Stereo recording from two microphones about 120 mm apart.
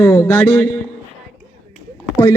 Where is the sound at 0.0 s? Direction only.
20° left (ahead or behind).